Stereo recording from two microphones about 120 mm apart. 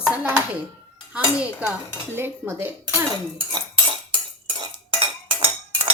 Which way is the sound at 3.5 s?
45° right (ahead or behind).